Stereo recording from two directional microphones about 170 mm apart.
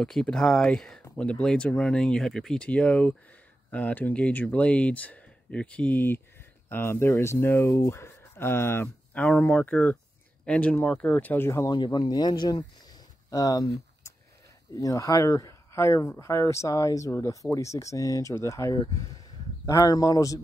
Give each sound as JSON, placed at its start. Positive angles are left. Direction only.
{"t": 0.0, "sound": "speech", "side_deg": 5}
{"t": 11.7, "sound": "speech", "side_deg": 30}